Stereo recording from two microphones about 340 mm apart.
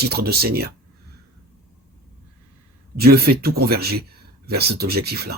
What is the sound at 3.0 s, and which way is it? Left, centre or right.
Speech, right.